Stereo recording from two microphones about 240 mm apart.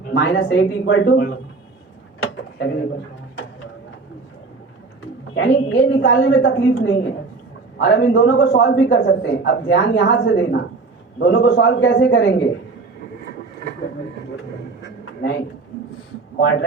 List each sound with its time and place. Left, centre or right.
0.1 s a man's voice: left
2.2 s a sound: left
5.3 s a man's voice: left
16.4 s a man's voice: left